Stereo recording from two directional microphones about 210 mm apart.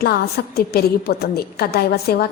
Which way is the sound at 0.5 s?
50° left (ahead or behind).